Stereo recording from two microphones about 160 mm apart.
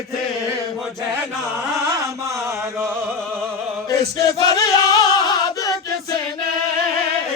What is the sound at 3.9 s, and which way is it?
Music, 20° left (ahead or behind).